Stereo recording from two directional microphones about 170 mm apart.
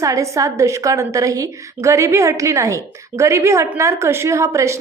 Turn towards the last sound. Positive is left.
turn(degrees=-15)  # may be behind; listen again after turning